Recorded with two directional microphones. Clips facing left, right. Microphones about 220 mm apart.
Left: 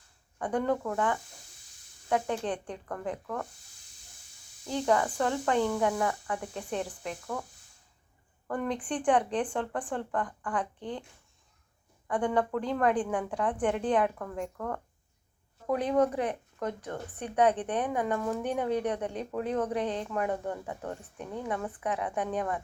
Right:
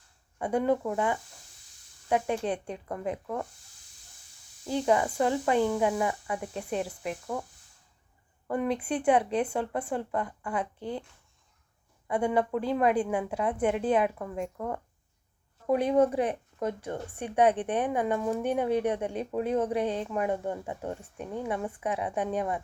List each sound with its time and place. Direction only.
0.3 s speech: 10° right (ahead or behind)
4.6 s speech: 15° right (ahead or behind)
8.4 s speech: 10° right (ahead or behind)
12.0 s speech: 10° right (ahead or behind); by 17.2 s 25° right (ahead or behind)
17.5 s speech: 15° right (ahead or behind)
18.7 s speech: 25° right (ahead or behind)
18.9 s speech: 10° right (ahead or behind)
19.7 s speech: 10° right (ahead or behind)